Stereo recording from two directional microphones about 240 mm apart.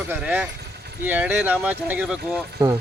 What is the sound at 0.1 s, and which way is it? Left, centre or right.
Speech, centre.